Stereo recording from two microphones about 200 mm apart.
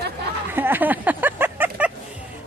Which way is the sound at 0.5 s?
10° right (ahead or behind).